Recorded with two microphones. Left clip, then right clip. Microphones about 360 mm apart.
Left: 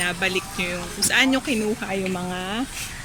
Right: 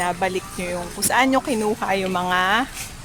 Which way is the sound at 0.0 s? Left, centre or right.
Centre.